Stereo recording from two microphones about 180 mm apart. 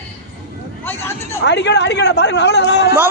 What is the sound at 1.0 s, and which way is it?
Speech, 15° left (ahead or behind).